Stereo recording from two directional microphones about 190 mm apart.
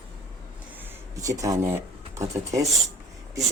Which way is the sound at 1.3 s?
15° right (ahead or behind).